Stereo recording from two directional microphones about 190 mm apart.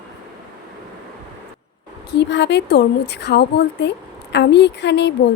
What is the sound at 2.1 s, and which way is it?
A woman's voice, 65° left (ahead or behind).